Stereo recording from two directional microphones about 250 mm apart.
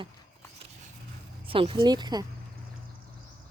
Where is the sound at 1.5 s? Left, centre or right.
Right.